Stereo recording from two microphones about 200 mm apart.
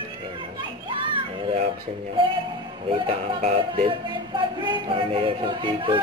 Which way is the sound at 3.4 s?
30° right (ahead or behind).